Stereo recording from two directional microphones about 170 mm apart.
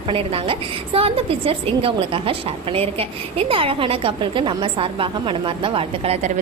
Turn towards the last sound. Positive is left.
turn(degrees=-35)  # may be behind; listen again after turning